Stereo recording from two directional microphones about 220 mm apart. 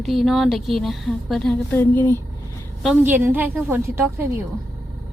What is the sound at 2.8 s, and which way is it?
Speech, 5° right (ahead or behind).